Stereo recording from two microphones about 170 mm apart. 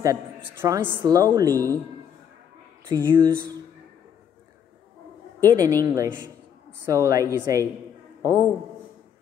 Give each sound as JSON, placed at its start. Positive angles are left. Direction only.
{"t": 0.0, "sound": "a woman's voice", "side_deg": -20}
{"t": 3.1, "sound": "speech", "side_deg": -15}
{"t": 5.4, "sound": "a woman's voice", "side_deg": -20}